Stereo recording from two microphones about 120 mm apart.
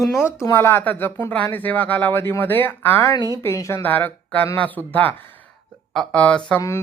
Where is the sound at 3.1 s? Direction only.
30° left (ahead or behind); by 6.6 s 10° left (ahead or behind).